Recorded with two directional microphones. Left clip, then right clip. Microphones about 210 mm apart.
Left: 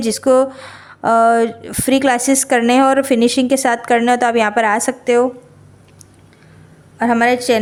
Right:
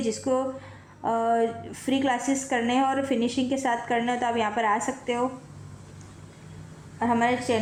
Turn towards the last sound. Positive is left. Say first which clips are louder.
# left 10 dB
turn(degrees=55)  # may be behind; listen again after turning